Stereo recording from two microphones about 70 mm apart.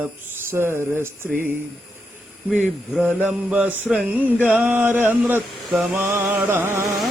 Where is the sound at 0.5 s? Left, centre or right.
Right.